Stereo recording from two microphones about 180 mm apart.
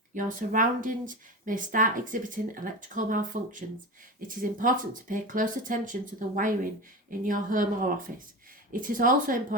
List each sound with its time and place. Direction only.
0.1 s speech: 45° right (ahead or behind)